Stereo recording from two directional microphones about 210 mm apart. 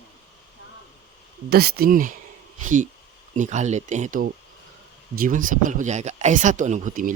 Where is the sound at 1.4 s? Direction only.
50° right (ahead or behind).